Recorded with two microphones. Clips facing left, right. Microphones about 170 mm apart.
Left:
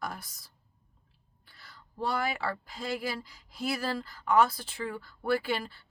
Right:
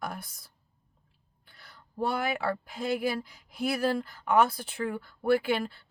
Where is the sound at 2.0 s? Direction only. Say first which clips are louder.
Right 3 dB; 15° right (ahead or behind).